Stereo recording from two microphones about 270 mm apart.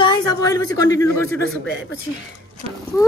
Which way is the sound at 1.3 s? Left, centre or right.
Right.